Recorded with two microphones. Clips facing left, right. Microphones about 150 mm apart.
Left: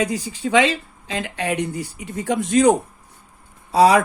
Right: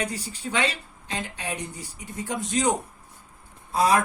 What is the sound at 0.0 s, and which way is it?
Speech, 90° left.